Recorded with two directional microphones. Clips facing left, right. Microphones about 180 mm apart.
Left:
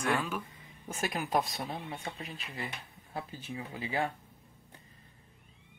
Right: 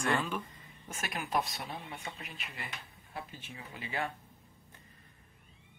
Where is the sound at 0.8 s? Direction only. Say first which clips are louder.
Left 5 dB; 35° left (ahead or behind).